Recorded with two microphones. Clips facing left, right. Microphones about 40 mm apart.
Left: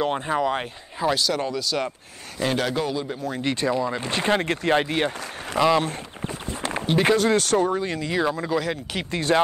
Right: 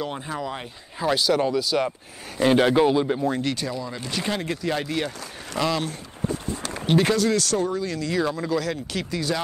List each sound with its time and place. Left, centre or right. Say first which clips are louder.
0.0 s speech: left 7 dB; left
1.1 s speech: right 3 dB; centre
2.6 s a man's voice: right 7 dB; right
3.4 s speech: left 5 dB; left
4.1 s speech: left 3 dB; left
5.9 s a sound: right 2 dB; left
7.2 s speech: left 2 dB; left; by 9.0 s centre
9.1 s speech: left 6 dB; left